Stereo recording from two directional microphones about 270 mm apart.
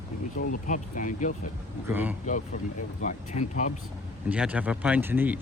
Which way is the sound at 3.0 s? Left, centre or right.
Left.